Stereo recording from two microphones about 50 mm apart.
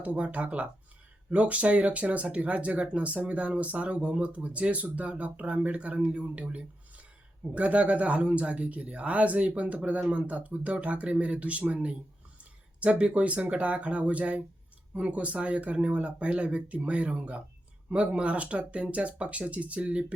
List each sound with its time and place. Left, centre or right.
0.0 s speech: right